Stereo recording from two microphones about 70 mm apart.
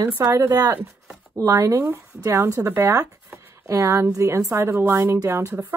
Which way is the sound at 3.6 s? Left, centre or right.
Right.